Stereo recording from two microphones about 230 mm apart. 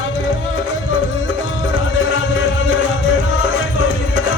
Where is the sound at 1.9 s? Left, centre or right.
Left.